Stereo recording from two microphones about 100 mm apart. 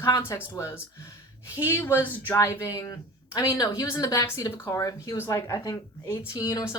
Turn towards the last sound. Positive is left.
turn(degrees=30)  # may be behind; listen again after turning